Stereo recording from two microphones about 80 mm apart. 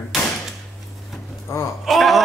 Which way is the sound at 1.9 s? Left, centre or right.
Centre.